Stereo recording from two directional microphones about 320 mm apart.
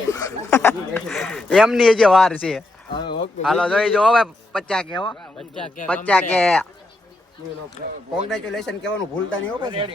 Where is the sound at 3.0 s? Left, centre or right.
Centre.